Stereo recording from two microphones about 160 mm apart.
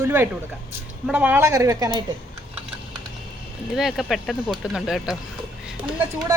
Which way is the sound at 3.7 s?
Centre (ahead or behind).